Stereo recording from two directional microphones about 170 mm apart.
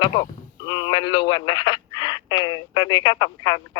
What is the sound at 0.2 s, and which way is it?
Speech, 25° left (ahead or behind).